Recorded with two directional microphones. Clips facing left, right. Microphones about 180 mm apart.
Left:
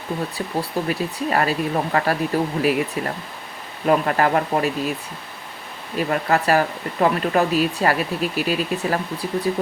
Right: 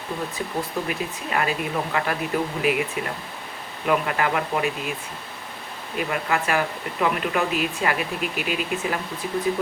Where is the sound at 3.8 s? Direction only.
40° left (ahead or behind).